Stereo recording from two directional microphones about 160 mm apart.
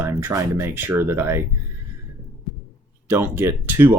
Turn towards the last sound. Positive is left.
turn(degrees=-15)  # may be behind; listen again after turning